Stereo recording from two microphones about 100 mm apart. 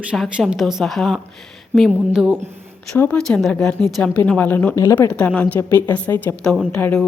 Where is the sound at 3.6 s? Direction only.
5° left (ahead or behind).